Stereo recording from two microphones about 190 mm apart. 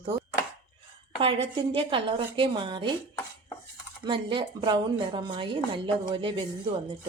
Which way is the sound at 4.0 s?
25° right (ahead or behind).